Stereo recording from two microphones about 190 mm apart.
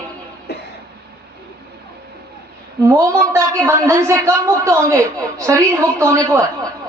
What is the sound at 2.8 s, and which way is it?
A man's voice, 15° right (ahead or behind).